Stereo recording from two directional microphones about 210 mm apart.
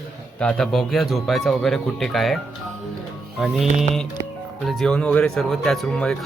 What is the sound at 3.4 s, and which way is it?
Speech, centre (ahead or behind).